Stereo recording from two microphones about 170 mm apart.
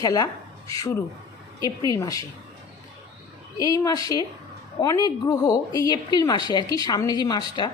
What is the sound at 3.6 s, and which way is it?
A woman's voice, 20° left (ahead or behind).